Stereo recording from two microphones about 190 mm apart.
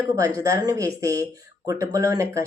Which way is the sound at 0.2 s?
15° right (ahead or behind).